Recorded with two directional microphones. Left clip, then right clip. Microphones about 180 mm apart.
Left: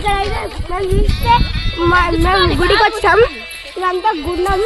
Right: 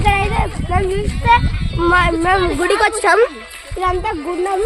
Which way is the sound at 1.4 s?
25° left (ahead or behind).